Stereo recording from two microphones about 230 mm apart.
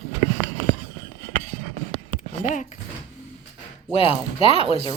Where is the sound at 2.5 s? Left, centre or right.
Left.